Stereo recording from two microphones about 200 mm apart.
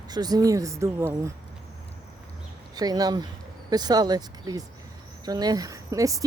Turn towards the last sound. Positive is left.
turn(degrees=-15)  # may be behind; listen again after turning